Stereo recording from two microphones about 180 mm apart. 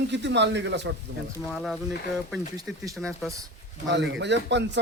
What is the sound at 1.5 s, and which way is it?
Speech, centre (ahead or behind).